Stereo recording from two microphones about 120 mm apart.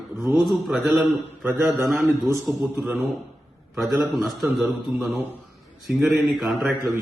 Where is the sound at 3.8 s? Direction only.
Centre (ahead or behind).